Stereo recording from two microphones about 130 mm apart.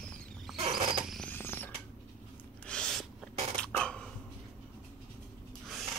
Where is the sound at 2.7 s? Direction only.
5° left (ahead or behind).